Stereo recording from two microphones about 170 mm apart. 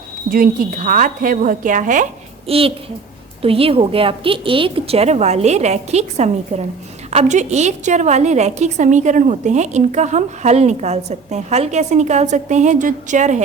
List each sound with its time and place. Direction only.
0.3 s a woman's voice: 55° right (ahead or behind)
2.5 s a woman's voice: 35° right (ahead or behind)